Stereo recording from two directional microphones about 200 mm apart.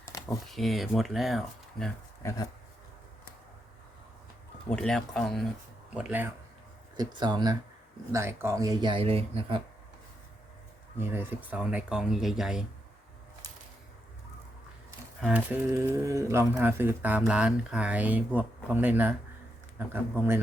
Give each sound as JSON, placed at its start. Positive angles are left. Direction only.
{"t": 0.4, "sound": "speech", "side_deg": 0}
{"t": 2.2, "sound": "speech", "side_deg": 15}
{"t": 4.7, "sound": "speech", "side_deg": 5}
{"t": 6.9, "sound": "speech", "side_deg": -20}
{"t": 10.9, "sound": "speech", "side_deg": -10}
{"t": 15.2, "sound": "speech", "side_deg": -5}